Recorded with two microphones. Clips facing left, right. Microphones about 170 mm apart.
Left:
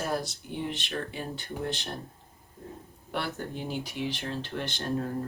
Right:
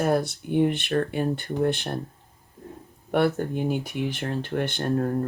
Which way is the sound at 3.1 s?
55° right (ahead or behind).